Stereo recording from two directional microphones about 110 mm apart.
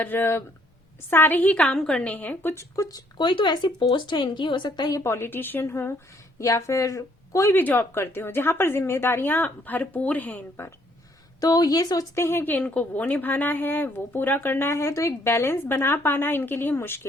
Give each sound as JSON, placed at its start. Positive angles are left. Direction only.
{"t": 0.0, "sound": "a woman's voice", "side_deg": 20}
{"t": 3.2, "sound": "a woman's voice", "side_deg": 45}
{"t": 11.3, "sound": "speech", "side_deg": 35}